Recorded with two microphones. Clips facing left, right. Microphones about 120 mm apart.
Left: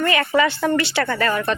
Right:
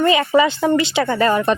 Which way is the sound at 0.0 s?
20° right (ahead or behind).